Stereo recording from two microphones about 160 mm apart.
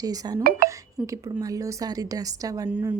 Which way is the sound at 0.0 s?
25° right (ahead or behind).